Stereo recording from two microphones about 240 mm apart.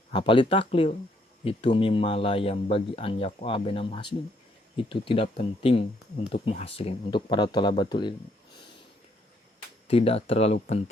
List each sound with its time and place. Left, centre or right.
0.1 s speech: centre
9.8 s speech: left